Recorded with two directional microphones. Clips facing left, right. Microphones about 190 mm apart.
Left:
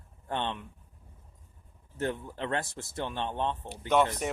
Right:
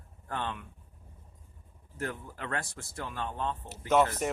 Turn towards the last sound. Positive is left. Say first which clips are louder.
# even
turn(degrees=0)  # may be behind; listen again after turning